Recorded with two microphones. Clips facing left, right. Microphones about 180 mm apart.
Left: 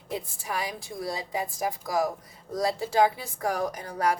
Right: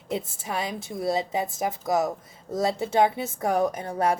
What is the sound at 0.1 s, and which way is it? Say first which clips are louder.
A woman's voice: right 3 dB; 25° right (ahead or behind).